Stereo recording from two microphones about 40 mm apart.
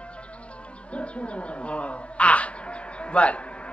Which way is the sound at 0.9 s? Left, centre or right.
Left.